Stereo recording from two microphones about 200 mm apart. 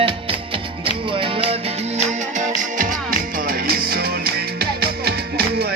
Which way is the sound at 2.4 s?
40° right (ahead or behind).